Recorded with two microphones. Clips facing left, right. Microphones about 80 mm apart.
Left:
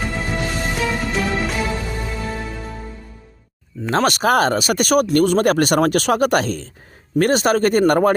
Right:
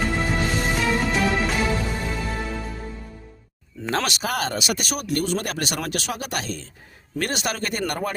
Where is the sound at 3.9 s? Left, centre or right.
Left.